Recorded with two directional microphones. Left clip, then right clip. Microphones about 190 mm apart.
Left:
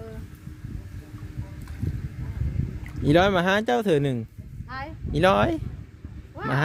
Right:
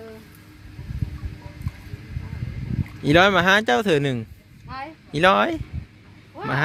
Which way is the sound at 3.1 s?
10° left (ahead or behind).